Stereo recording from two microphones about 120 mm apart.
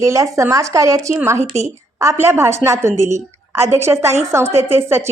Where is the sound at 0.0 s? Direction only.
25° right (ahead or behind).